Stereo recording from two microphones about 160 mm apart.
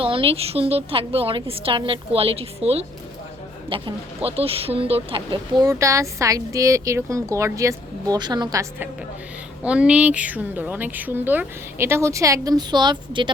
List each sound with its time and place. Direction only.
0.0 s a woman's voice: 35° right (ahead or behind)
9.6 s a woman's voice: 5° right (ahead or behind); by 13.3 s 30° right (ahead or behind)